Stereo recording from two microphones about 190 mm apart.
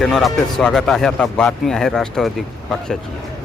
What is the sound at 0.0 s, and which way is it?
Speech, centre (ahead or behind).